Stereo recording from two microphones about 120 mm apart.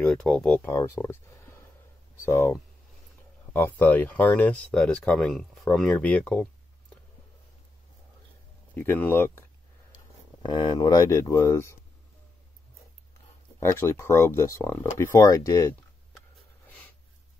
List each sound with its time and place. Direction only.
0.0 s speech: 5° left (ahead or behind)
0.7 s speech: 25° left (ahead or behind)
3.5 s speech: 15° left (ahead or behind)
8.7 s speech: 15° left (ahead or behind)
10.4 s speech: 40° left (ahead or behind)
11.1 s speech: 25° left (ahead or behind)
13.6 s speech: 20° left (ahead or behind)